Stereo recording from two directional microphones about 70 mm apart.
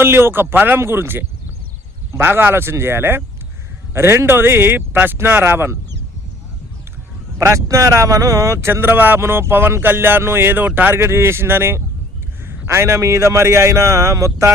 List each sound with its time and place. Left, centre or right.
0.0 s speech: right
7.3 s a man's voice: right
8.7 s speech: right
10.9 s a man's voice: right